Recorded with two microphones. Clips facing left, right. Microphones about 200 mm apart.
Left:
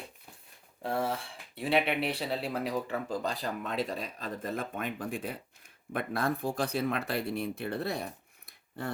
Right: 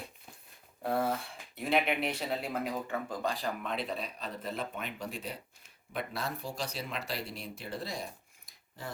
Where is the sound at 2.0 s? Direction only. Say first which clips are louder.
Left 2 dB; 30° left (ahead or behind).